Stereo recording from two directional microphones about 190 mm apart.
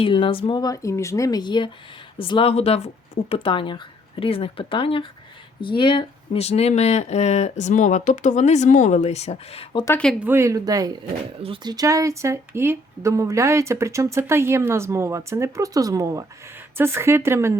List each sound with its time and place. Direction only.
0.0 s speech: 25° left (ahead or behind)
9.8 s speech: 10° left (ahead or behind)
10.2 s speech: 10° right (ahead or behind)